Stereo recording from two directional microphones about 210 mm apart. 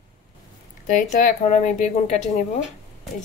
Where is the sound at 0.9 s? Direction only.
40° left (ahead or behind).